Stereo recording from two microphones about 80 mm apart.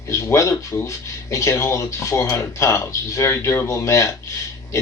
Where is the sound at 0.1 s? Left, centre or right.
Left.